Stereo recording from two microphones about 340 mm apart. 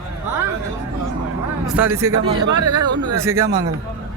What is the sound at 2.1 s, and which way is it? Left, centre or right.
Speech, right.